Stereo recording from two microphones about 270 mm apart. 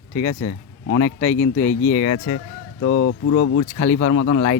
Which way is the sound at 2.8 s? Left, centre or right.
Left.